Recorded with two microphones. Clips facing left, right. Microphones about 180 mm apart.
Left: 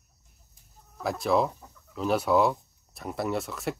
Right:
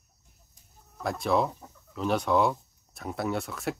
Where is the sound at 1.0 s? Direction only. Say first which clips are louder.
Left 1 dB; centre (ahead or behind).